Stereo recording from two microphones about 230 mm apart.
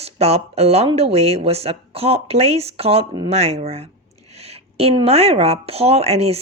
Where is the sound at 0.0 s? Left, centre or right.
Right.